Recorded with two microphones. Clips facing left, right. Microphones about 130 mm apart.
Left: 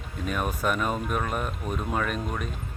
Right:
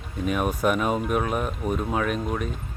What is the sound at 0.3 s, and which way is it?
Speech, 5° right (ahead or behind).